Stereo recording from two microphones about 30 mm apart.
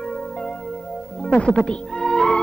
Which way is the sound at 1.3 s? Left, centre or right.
Left.